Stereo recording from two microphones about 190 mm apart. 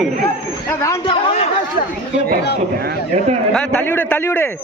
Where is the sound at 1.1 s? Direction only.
30° left (ahead or behind).